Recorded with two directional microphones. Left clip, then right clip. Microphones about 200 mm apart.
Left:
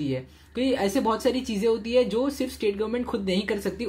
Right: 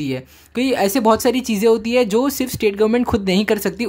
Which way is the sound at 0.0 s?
35° right (ahead or behind).